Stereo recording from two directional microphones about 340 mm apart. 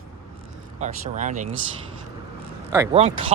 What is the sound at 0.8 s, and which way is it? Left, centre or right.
Speech, right.